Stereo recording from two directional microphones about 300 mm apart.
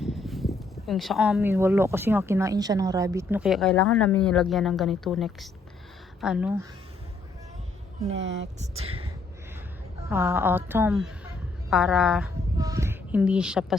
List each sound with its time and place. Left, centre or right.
0.0 s speech: centre
8.1 s speech: right
8.5 s speech: centre
10.1 s a woman's voice: centre